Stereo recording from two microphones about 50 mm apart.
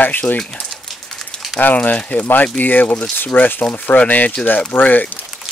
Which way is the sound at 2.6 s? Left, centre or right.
Left.